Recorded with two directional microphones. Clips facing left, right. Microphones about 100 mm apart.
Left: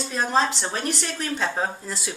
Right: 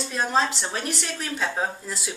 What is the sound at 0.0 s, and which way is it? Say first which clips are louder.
Speech: left 1 dB; centre (ahead or behind).